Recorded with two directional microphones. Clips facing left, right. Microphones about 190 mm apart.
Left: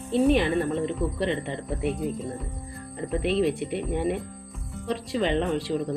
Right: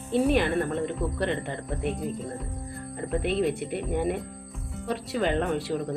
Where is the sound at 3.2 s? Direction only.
Centre (ahead or behind).